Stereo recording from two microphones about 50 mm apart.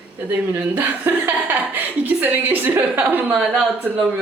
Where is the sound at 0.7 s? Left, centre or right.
Right.